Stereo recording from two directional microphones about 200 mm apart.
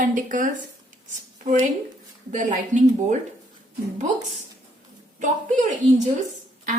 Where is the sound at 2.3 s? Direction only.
40° right (ahead or behind).